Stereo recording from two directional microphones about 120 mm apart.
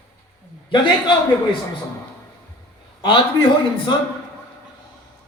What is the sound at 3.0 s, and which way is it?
Speech, 45° left (ahead or behind).